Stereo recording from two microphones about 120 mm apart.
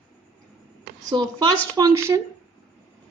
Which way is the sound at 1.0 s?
35° right (ahead or behind).